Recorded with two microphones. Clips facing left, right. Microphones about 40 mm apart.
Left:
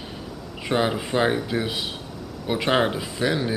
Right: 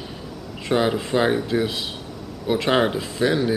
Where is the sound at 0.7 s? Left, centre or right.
Centre.